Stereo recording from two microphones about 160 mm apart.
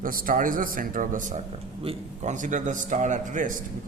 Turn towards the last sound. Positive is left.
turn(degrees=-55)  # may be behind; listen again after turning